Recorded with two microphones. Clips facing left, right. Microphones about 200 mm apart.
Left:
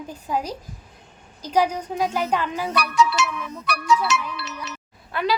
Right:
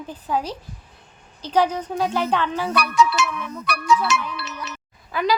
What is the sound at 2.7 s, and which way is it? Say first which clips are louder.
Music: right 1 dB; 55° right (ahead or behind).